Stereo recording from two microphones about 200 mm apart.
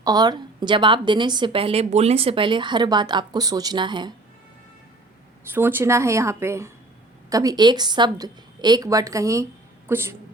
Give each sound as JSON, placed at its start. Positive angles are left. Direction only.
{"t": 0.0, "sound": "a woman's voice", "side_deg": -20}
{"t": 5.5, "sound": "a woman's voice", "side_deg": -10}